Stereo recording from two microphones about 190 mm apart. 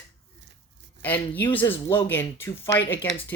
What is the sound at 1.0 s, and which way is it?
Speech, 10° left (ahead or behind).